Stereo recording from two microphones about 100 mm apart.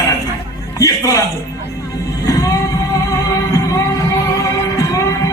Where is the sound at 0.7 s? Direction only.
35° left (ahead or behind).